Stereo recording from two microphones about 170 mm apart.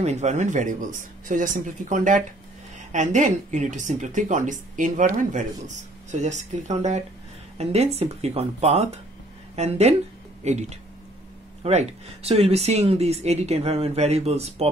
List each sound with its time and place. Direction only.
0.0 s speech: 40° right (ahead or behind)